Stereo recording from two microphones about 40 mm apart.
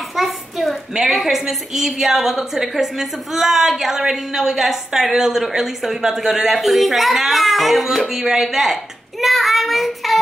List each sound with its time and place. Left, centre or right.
0.1 s a sound: centre
0.9 s a woman's voice: centre
9.2 s child singing: centre